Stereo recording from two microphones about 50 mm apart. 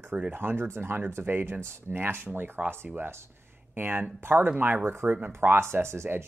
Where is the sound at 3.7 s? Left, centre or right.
Right.